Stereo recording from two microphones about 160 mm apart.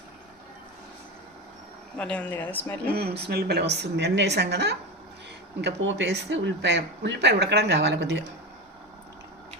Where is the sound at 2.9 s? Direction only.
85° right.